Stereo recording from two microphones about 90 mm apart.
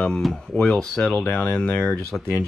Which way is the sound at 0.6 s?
10° left (ahead or behind).